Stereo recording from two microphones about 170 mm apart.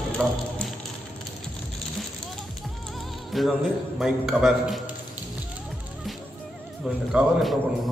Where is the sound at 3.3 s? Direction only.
Centre (ahead or behind).